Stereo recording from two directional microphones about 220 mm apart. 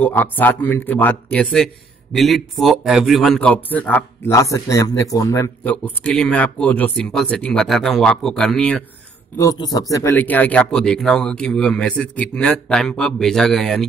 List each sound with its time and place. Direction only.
0.0 s a man's voice: 10° left (ahead or behind)
9.4 s a man's voice: 15° left (ahead or behind)